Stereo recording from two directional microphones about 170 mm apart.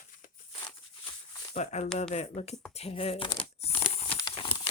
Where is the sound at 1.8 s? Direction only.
5° left (ahead or behind).